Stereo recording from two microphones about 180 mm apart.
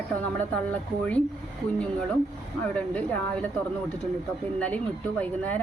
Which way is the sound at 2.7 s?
5° left (ahead or behind).